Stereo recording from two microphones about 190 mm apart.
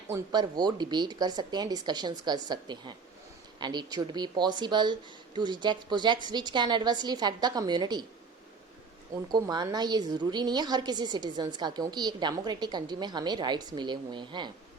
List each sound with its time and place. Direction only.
0.1 s a woman's voice: 20° right (ahead or behind)
9.3 s a woman's voice: 20° right (ahead or behind)